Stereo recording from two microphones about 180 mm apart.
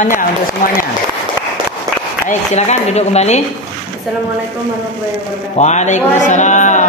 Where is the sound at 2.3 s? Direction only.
40° left (ahead or behind).